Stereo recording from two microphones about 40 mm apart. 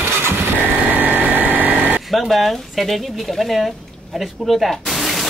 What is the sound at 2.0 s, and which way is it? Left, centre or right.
Speech, centre.